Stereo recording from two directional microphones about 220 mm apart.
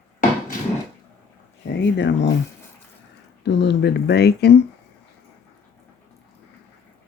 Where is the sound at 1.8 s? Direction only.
55° left (ahead or behind).